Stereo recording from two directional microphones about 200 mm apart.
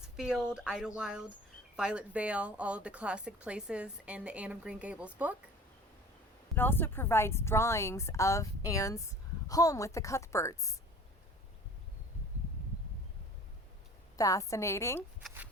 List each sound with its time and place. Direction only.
0.2 s a woman's voice: 5° right (ahead or behind)
6.6 s a woman's voice: 10° left (ahead or behind)
14.2 s a woman's voice: 15° left (ahead or behind)